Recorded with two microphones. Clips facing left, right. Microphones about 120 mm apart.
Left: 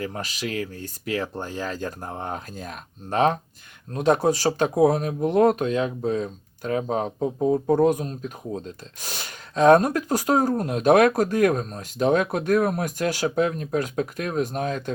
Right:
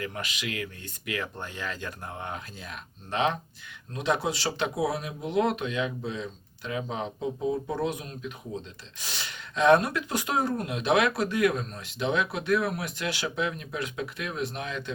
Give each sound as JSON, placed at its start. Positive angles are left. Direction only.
{"t": 0.0, "sound": "speech", "side_deg": 35}